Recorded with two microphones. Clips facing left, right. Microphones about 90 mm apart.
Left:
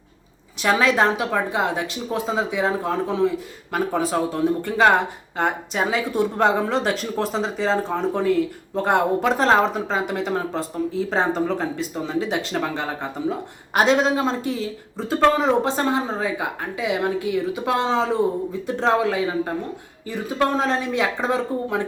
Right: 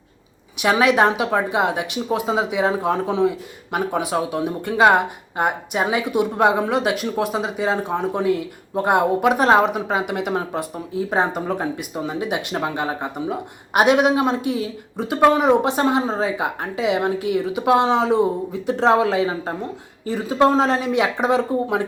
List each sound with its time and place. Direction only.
0.6 s a woman's voice: 15° right (ahead or behind)